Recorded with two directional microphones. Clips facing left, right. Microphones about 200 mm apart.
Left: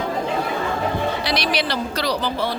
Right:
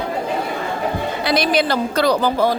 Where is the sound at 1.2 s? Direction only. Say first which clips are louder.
Right 5 dB; 50° right (ahead or behind).